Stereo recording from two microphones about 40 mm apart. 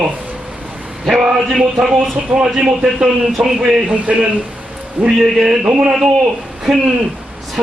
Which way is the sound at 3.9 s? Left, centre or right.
Right.